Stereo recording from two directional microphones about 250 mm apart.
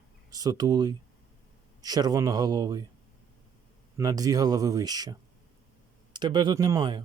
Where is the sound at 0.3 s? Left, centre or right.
Centre.